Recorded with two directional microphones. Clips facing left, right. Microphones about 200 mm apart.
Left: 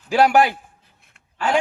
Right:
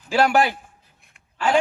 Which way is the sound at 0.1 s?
15° left (ahead or behind).